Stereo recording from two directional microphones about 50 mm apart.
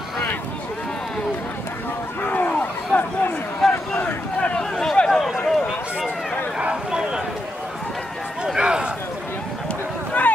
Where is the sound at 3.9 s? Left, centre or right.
Left.